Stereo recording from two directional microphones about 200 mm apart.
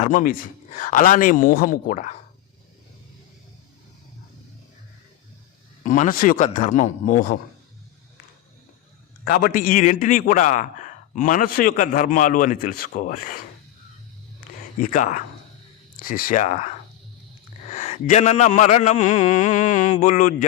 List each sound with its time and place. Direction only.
0.0 s a man's voice: 40° left (ahead or behind)
5.8 s a man's voice: 40° left (ahead or behind)
9.2 s a man's voice: 45° left (ahead or behind)
14.8 s a man's voice: 40° left (ahead or behind)